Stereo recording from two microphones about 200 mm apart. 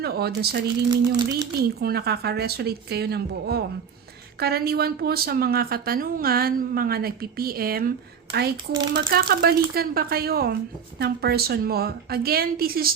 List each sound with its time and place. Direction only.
0.0 s speech: 50° right (ahead or behind)
0.9 s a sound: 20° right (ahead or behind)
1.5 s speech: 50° right (ahead or behind)